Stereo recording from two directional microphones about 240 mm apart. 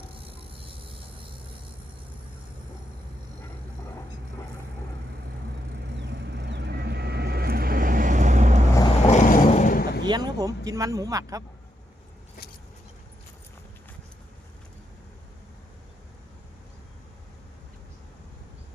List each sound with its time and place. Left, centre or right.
0.2 s insect: right
6.0 s vehicle: right
9.0 s vehicle: left
10.1 s speech: centre